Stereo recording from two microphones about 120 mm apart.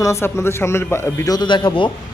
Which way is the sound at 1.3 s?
40° left (ahead or behind).